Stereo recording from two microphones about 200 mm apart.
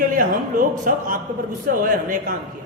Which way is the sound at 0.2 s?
45° right (ahead or behind).